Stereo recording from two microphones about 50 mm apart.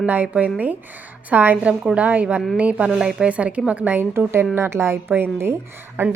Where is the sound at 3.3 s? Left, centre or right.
Right.